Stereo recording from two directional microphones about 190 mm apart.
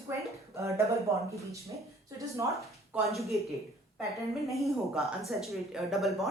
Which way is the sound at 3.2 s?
Centre (ahead or behind).